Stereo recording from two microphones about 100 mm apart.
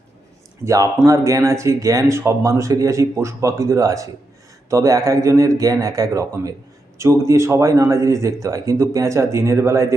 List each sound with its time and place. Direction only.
0.6 s speech: 30° right (ahead or behind)